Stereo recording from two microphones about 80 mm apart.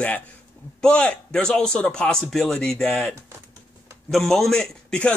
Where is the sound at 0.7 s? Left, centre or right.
Centre.